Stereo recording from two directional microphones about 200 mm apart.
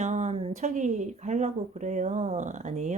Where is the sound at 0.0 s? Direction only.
35° right (ahead or behind).